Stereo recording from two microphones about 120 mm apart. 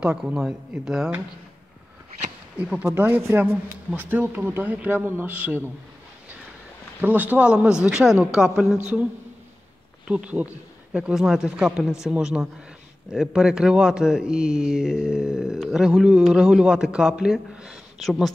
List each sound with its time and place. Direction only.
0.0 s speech: 10° right (ahead or behind)
2.8 s speech: 20° right (ahead or behind)
7.0 s speech: 15° right (ahead or behind)
10.0 s speech: 10° right (ahead or behind)